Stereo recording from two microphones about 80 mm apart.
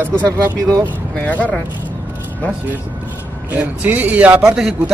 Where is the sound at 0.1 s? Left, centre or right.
Centre.